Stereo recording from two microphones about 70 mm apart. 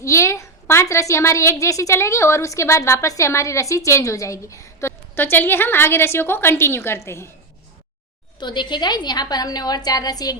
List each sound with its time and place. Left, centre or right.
0.0 s a woman's voice: left
8.4 s a woman's voice: left